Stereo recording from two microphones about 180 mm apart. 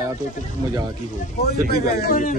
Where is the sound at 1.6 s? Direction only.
55° left (ahead or behind).